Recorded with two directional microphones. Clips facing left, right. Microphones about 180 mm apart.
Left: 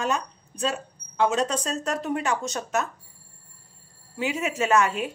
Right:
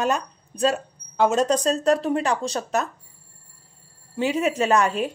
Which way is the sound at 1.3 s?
40° right (ahead or behind).